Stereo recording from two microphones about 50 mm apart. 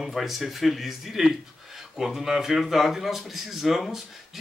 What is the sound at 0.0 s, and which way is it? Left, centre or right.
Speech, centre.